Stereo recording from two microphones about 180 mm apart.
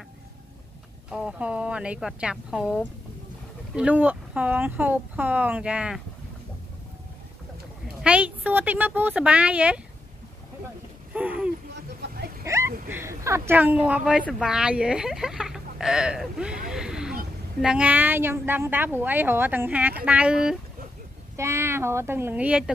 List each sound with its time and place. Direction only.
1.1 s a woman's voice: 5° right (ahead or behind)
8.0 s a woman's voice: 5° right (ahead or behind)
11.1 s a woman's voice: 5° right (ahead or behind)
12.4 s a sound: 15° right (ahead or behind)
12.8 s a woman's voice: 15° right (ahead or behind)